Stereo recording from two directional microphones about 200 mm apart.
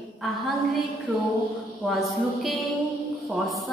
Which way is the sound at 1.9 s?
Centre (ahead or behind).